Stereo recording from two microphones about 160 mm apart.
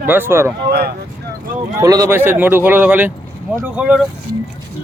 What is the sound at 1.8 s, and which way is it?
Speech, 20° right (ahead or behind).